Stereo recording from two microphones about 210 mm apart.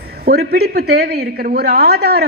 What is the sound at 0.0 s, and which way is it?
Speech, 50° right (ahead or behind).